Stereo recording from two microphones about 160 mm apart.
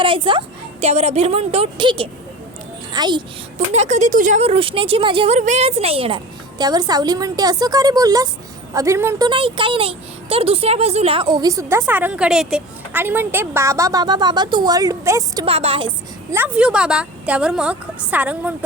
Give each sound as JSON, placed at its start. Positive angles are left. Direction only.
{"t": 0.0, "sound": "a woman's voice", "side_deg": -30}
{"t": 3.7, "sound": "speech", "side_deg": -45}
{"t": 4.4, "sound": "speech", "side_deg": -35}
{"t": 5.4, "sound": "a woman's voice", "side_deg": -45}
{"t": 9.2, "sound": "a woman's voice", "side_deg": -30}
{"t": 15.4, "sound": "speech", "side_deg": -35}
{"t": 16.3, "sound": "a woman's voice", "side_deg": -10}